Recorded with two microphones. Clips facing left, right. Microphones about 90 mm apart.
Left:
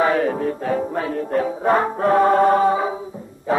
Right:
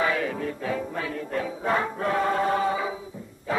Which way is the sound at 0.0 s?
40° left (ahead or behind).